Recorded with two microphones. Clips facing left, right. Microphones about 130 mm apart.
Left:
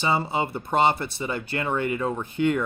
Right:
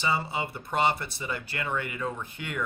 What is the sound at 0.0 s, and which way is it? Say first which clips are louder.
Speech: left 5 dB; 30° left (ahead or behind).